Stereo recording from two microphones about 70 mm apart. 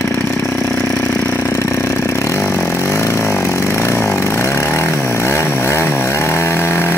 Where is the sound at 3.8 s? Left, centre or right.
Left.